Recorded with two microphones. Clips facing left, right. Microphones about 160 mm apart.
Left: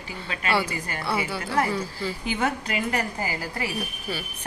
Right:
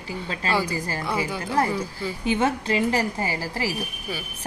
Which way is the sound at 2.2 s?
25° right (ahead or behind).